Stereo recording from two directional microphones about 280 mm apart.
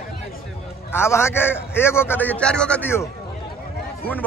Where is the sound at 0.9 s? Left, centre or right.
Centre.